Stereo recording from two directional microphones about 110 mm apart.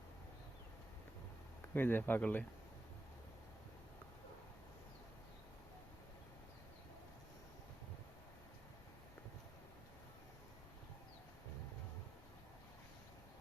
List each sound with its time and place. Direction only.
1.7 s speech: 20° left (ahead or behind)